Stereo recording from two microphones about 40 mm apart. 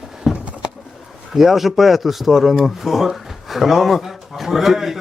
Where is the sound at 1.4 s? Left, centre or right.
Centre.